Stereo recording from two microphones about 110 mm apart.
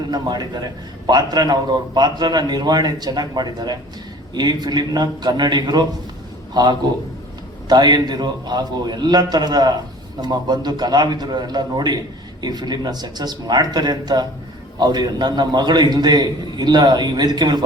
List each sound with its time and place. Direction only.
0.1 s a man's voice: 40° right (ahead or behind)